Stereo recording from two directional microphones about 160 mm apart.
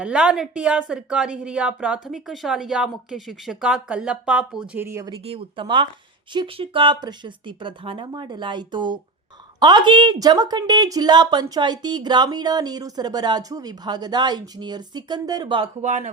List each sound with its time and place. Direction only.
0.0 s speech: 5° right (ahead or behind)
5.2 s a woman's voice: 35° right (ahead or behind)
15.8 s speech: 45° right (ahead or behind)